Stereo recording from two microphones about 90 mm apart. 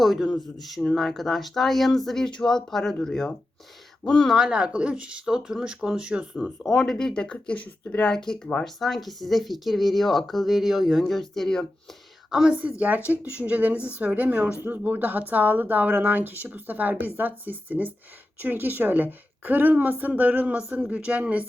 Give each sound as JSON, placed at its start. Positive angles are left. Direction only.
{"t": 0.0, "sound": "speech", "side_deg": 0}
{"t": 4.4, "sound": "a woman's voice", "side_deg": -10}
{"t": 6.3, "sound": "speech", "side_deg": 10}
{"t": 12.3, "sound": "a woman's voice", "side_deg": -10}